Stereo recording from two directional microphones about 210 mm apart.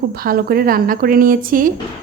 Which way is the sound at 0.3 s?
45° right (ahead or behind).